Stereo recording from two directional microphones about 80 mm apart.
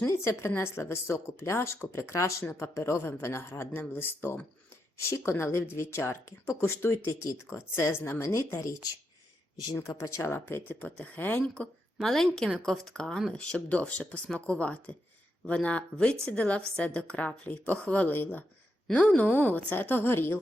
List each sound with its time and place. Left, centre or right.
0.0 s speech: left
10.0 s a woman's voice: left